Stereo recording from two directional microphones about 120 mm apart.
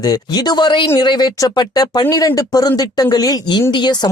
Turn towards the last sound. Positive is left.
turn(degrees=35)  # may be behind; listen again after turning